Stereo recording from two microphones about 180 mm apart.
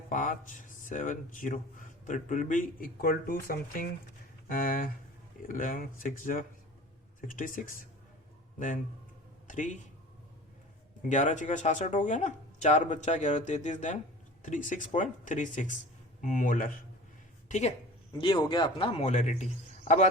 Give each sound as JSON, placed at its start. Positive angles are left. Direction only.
{"t": 0.1, "sound": "a man's voice", "side_deg": 45}
{"t": 11.1, "sound": "speech", "side_deg": 40}
{"t": 17.5, "sound": "speech", "side_deg": 40}
{"t": 18.2, "sound": "speech", "side_deg": 25}